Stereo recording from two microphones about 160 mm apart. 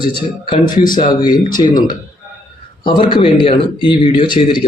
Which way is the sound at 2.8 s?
30° left (ahead or behind).